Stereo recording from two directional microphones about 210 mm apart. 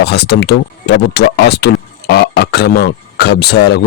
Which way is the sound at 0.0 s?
50° left (ahead or behind).